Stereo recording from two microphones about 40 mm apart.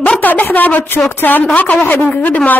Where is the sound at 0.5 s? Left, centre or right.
Left.